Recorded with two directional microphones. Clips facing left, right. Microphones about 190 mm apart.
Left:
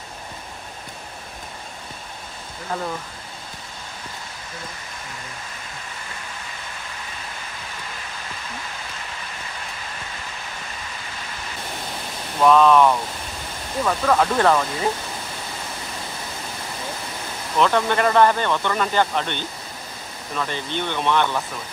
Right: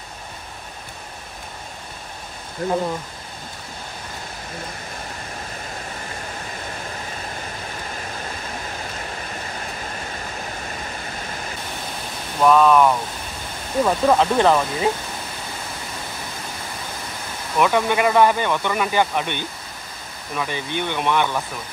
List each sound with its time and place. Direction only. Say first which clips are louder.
12.4 s speech: even; 5° right (ahead or behind)
13.8 s speech: right 2 dB; 20° right (ahead or behind)
17.6 s speech: right 1 dB; 10° right (ahead or behind)